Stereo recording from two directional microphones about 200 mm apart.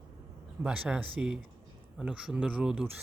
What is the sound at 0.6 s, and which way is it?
Speech, 5° right (ahead or behind).